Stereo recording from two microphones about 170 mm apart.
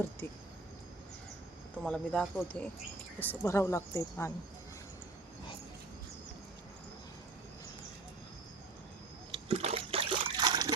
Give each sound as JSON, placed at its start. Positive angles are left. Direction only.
{"t": 1.8, "sound": "speech", "side_deg": 5}
{"t": 9.3, "sound": "trickle", "side_deg": -35}